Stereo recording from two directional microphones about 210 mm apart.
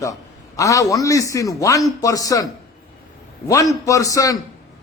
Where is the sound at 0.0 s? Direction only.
15° left (ahead or behind).